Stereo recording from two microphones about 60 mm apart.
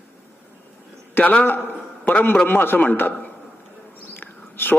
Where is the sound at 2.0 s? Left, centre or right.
Left.